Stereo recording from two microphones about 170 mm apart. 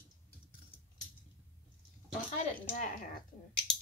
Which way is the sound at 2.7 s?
45° left (ahead or behind).